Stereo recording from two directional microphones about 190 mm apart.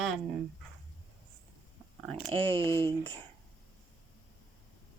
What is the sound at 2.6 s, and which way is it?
Speech, 15° left (ahead or behind).